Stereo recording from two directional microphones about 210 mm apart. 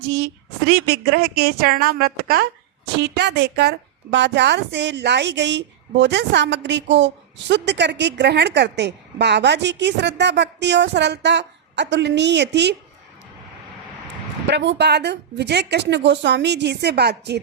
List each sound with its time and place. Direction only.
0.7 s a woman's voice: 50° right (ahead or behind)
14.4 s speech: 55° right (ahead or behind)